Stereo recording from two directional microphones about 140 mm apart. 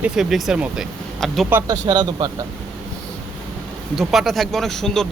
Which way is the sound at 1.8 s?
30° right (ahead or behind).